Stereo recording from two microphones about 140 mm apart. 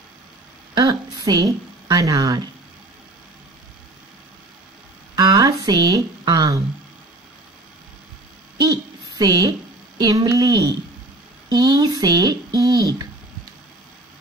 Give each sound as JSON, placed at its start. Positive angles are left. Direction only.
{"t": 0.7, "sound": "a woman's voice", "side_deg": -25}
{"t": 5.1, "sound": "a sound", "side_deg": -30}
{"t": 9.2, "sound": "a woman's voice", "side_deg": -25}